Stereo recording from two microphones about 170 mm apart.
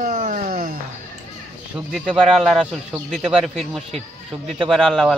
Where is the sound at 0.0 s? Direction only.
50° right (ahead or behind).